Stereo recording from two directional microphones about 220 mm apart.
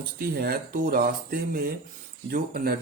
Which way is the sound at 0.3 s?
45° right (ahead or behind).